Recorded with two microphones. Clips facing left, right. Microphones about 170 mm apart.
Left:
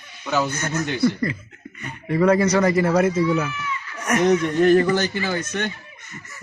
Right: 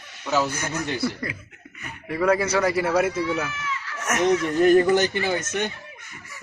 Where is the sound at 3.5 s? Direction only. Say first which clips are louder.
Left 2 dB; 90° right.